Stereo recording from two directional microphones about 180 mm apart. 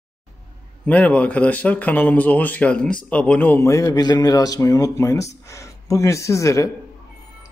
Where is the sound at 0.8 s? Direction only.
10° left (ahead or behind).